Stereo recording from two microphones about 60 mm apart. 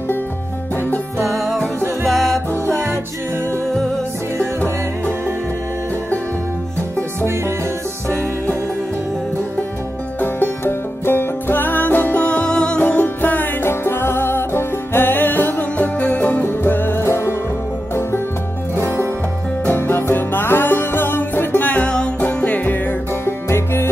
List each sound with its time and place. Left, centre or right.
2.0 s music: centre
10.2 s music: left
19.6 s music: left
23.2 s music: left